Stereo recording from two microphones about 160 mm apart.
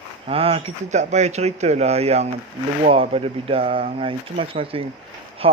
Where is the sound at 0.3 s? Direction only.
35° right (ahead or behind).